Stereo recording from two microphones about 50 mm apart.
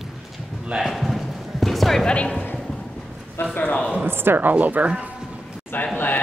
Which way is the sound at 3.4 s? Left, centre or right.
Left.